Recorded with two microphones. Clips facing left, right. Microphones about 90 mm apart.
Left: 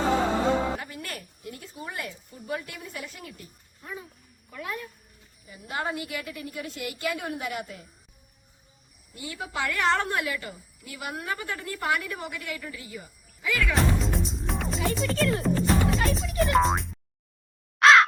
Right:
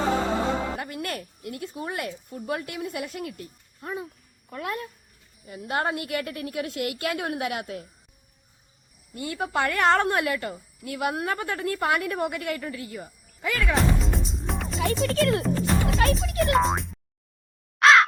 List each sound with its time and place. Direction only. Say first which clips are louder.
0.8 s speech: right 6 dB; 55° right (ahead or behind)
9.1 s a woman's voice: right 6 dB; 55° right (ahead or behind)
13.7 s music: right 1 dB; centre (ahead or behind)
17.7 s caw: even; centre (ahead or behind)